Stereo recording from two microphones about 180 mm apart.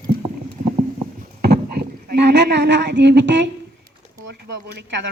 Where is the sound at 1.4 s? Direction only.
60° right (ahead or behind); by 3.5 s 80° right.